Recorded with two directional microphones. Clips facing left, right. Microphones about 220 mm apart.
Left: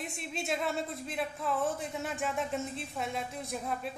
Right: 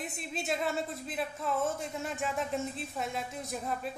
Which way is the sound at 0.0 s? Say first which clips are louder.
Even; centre (ahead or behind).